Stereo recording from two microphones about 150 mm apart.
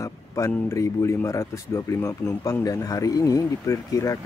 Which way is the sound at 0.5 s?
15° left (ahead or behind).